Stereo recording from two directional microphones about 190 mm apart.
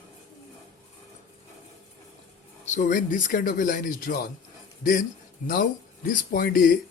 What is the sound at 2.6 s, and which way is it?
Speech, 40° left (ahead or behind).